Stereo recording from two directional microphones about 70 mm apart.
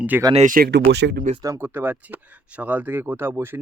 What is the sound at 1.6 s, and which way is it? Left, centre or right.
Speech, right.